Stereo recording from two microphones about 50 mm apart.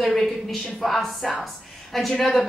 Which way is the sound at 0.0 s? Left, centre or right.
Centre.